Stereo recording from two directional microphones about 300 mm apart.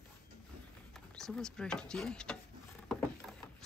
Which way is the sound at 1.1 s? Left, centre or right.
Centre.